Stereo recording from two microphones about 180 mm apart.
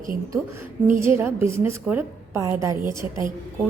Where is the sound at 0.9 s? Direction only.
15° right (ahead or behind).